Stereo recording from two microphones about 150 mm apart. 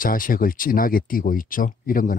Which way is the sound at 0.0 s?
70° left (ahead or behind).